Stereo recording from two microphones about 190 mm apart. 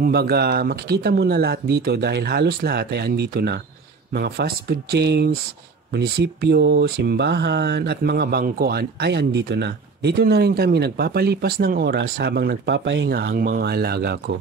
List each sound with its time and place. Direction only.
0.0 s speech: 55° right (ahead or behind); by 13.1 s 70° right (ahead or behind)
13.1 s speech: 50° right (ahead or behind)